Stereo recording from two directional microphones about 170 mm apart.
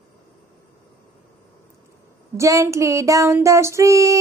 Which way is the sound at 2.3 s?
20° right (ahead or behind).